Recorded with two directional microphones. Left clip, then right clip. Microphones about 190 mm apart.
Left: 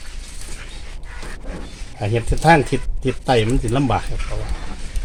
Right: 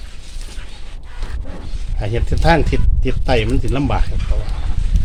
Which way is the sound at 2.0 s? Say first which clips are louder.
Left 1 dB; 20° left (ahead or behind).